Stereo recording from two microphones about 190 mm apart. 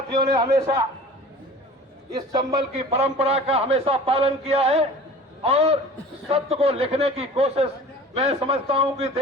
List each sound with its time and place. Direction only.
0.1 s a man's voice: 20° right (ahead or behind)
2.1 s a man's voice: 20° right (ahead or behind)
2.7 s a man's voice: 35° right (ahead or behind)